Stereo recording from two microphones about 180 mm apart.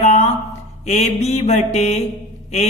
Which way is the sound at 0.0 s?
40° left (ahead or behind).